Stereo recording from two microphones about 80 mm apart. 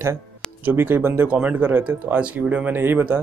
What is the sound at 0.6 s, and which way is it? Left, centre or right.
Speech, right.